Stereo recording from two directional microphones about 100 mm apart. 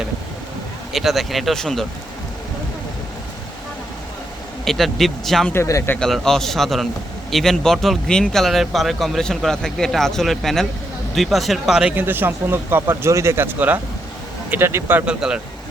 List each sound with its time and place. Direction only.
0.9 s speech: centre (ahead or behind)
4.6 s speech: centre (ahead or behind)
5.5 s speech: 30° left (ahead or behind)
6.0 s speech: 5° left (ahead or behind)
11.9 s speech: 20° right (ahead or behind)